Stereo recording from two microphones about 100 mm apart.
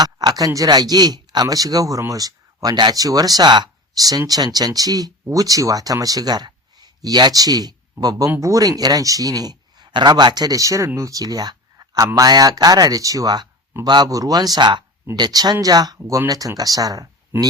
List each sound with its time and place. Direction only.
0.0 s speech: 45° right (ahead or behind)
17.3 s speech: 20° right (ahead or behind)